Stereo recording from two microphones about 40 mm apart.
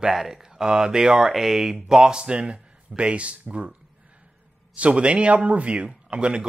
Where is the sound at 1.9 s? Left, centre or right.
Right.